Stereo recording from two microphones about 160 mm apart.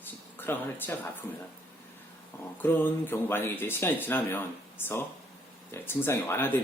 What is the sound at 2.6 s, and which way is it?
Speech, 15° left (ahead or behind).